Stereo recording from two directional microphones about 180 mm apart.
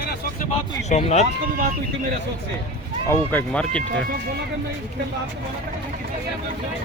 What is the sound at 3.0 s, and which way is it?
Speech, 10° left (ahead or behind).